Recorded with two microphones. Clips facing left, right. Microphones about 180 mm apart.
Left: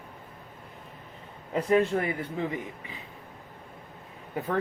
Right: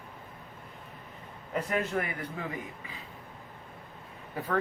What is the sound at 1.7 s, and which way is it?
Speech, 30° left (ahead or behind).